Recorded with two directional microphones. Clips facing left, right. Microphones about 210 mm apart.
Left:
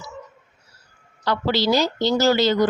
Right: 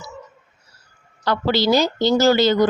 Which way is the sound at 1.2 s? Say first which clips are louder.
Right 2 dB; 50° right (ahead or behind).